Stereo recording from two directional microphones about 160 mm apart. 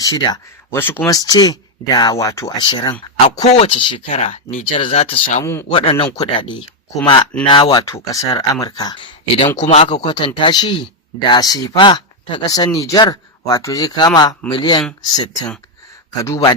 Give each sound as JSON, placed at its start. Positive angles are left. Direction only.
{"t": 0.0, "sound": "speech", "side_deg": 25}
{"t": 0.8, "sound": "speech", "side_deg": 15}
{"t": 2.6, "sound": "speech", "side_deg": 30}
{"t": 3.3, "sound": "speech", "side_deg": 45}
{"t": 5.4, "sound": "speech", "side_deg": 15}
{"t": 5.7, "sound": "speech", "side_deg": 35}
{"t": 9.6, "sound": "speech", "side_deg": 45}
{"t": 9.9, "sound": "speech", "side_deg": 30}
{"t": 16.2, "sound": "speech", "side_deg": 20}